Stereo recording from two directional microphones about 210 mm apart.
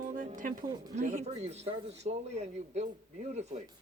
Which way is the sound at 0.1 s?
40° right (ahead or behind).